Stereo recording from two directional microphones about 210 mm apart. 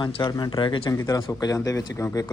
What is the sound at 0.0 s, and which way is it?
Speech, 20° left (ahead or behind).